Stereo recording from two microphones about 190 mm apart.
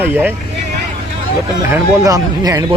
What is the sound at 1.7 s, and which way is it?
Speech, 15° right (ahead or behind).